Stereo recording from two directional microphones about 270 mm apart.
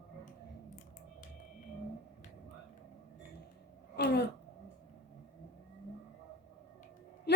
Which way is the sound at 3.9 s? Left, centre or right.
Left.